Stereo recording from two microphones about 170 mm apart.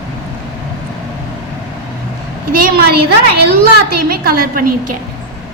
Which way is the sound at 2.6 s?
65° right (ahead or behind).